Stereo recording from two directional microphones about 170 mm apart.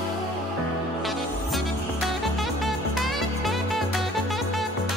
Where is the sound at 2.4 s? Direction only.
Centre (ahead or behind).